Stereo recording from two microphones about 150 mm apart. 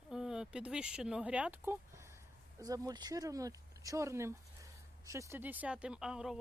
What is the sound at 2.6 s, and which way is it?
Speech, 25° right (ahead or behind).